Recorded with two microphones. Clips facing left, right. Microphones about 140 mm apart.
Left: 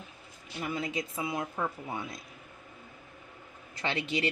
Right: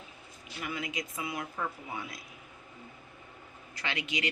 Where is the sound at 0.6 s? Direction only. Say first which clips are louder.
Left 3 dB; 30° left (ahead or behind).